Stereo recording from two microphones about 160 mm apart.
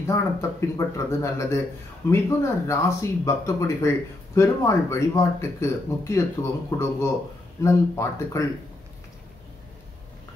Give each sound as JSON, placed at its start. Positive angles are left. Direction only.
{"t": 0.0, "sound": "speech", "side_deg": 15}